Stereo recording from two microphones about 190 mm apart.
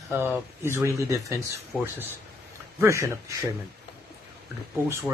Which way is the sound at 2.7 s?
15° right (ahead or behind).